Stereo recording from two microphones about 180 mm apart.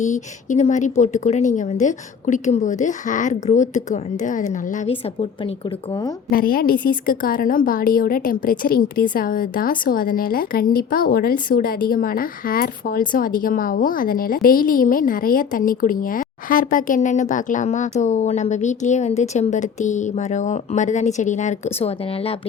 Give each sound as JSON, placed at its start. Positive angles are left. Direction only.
{"t": 0.0, "sound": "a woman's voice", "side_deg": 40}
{"t": 6.3, "sound": "a woman's voice", "side_deg": 55}